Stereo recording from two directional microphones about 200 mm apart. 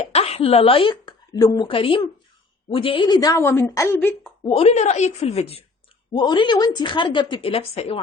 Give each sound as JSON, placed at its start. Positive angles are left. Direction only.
{"t": 0.1, "sound": "a woman's voice", "side_deg": 30}
{"t": 4.4, "sound": "a woman's voice", "side_deg": 30}